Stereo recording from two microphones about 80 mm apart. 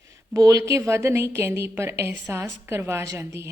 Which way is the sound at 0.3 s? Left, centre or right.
Right.